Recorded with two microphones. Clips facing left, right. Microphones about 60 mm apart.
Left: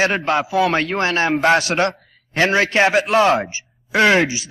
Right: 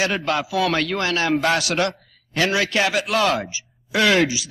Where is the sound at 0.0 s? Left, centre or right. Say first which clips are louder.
Left 4 dB; left.